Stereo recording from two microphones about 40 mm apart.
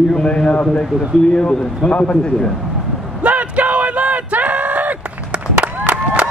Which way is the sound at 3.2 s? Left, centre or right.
Right.